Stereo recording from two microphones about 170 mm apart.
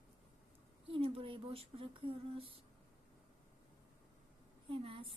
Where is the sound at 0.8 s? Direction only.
35° right (ahead or behind).